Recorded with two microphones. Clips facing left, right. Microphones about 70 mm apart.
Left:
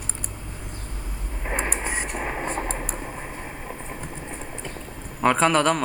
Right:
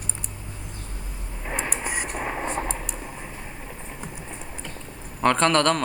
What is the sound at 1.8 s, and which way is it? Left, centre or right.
Vehicle, left.